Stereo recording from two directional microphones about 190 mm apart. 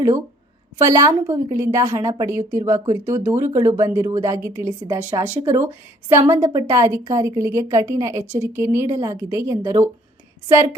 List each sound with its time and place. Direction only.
0.9 s a woman's voice: 15° right (ahead or behind)